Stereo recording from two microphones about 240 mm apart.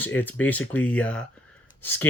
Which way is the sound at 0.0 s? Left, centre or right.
Centre.